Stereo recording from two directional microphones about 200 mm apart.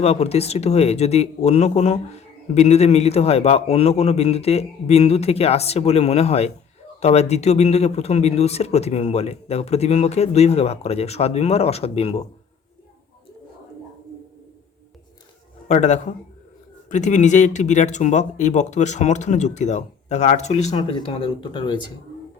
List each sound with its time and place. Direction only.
0.0 s speech: 30° left (ahead or behind)
15.7 s speech: 35° left (ahead or behind)